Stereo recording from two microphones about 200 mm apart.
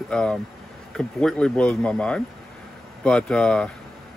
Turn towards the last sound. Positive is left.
turn(degrees=5)  # may be behind; listen again after turning